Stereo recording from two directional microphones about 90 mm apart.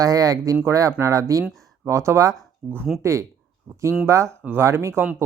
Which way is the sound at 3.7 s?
20° right (ahead or behind).